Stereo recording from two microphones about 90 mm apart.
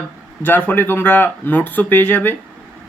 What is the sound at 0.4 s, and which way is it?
Speech, 20° left (ahead or behind).